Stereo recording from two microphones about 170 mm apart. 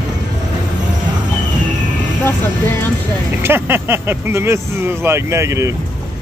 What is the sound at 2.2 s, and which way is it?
Speech, 15° left (ahead or behind).